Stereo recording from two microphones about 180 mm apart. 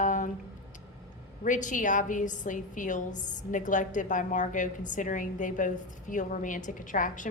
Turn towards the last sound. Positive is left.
turn(degrees=45)  # may be behind; listen again after turning